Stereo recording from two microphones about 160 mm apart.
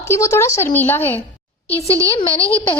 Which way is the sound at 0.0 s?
20° left (ahead or behind).